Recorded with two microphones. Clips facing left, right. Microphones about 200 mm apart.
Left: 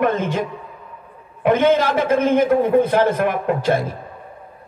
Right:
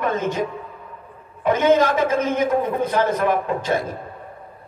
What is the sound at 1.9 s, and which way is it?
Speech, 55° left (ahead or behind).